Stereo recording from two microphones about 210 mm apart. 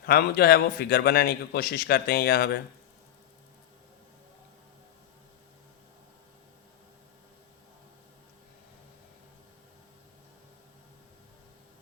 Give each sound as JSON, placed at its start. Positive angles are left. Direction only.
{"t": 0.0, "sound": "a man's voice", "side_deg": 45}